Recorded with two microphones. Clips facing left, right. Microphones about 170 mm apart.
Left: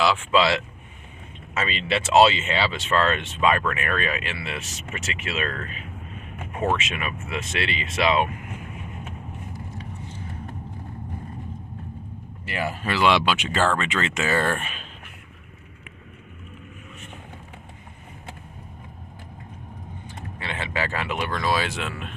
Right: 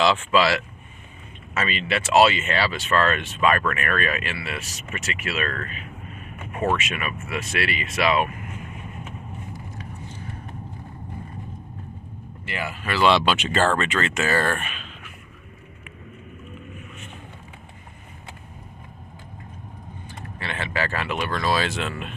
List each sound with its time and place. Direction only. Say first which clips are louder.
0.3 s speech: even; 20° left (ahead or behind)
6.7 s speech: right 1 dB; 25° left (ahead or behind)
12.5 s speech: left 3 dB; 35° left (ahead or behind)
12.9 s speech: right 2 dB; 15° left (ahead or behind)
14.6 s speech: right 1 dB; 35° left (ahead or behind)
20.1 s speech: right 1 dB; 15° left (ahead or behind)